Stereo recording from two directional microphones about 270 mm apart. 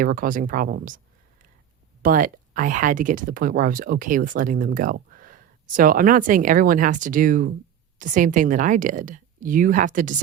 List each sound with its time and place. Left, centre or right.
0.0 s speech: right